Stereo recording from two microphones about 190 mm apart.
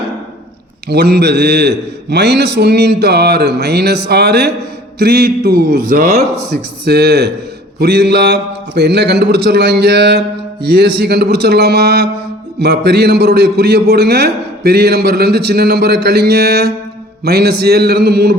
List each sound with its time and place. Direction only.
0.9 s a man's voice: 60° right (ahead or behind)